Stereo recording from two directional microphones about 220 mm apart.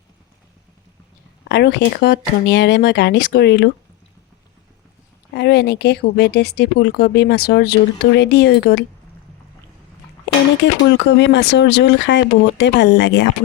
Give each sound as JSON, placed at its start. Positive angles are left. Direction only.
{"t": 1.5, "sound": "speech", "side_deg": 50}
{"t": 5.3, "sound": "speech", "side_deg": 50}
{"t": 10.2, "sound": "speech", "side_deg": 55}